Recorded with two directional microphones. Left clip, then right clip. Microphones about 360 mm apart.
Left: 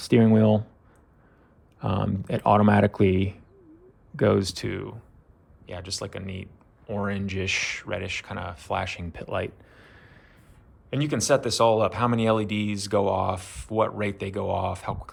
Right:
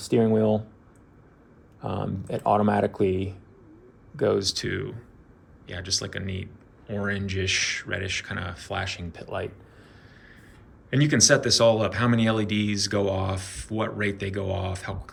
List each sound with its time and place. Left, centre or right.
0.0 s speech: left
1.8 s speech: centre
10.8 s speech: centre